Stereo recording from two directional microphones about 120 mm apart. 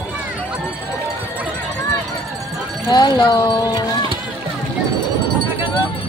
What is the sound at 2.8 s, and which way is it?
Speech, 40° left (ahead or behind).